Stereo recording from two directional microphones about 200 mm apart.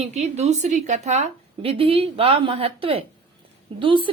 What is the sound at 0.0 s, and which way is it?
A woman's voice, 35° right (ahead or behind).